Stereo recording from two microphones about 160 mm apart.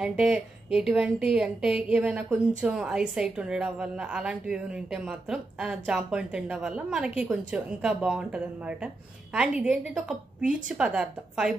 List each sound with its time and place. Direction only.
0.0 s speech: 5° right (ahead or behind)